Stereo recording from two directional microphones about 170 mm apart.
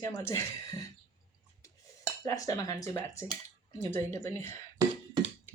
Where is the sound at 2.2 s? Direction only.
20° left (ahead or behind).